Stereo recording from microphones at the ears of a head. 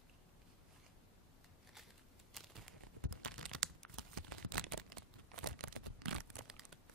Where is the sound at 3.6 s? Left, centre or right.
Right.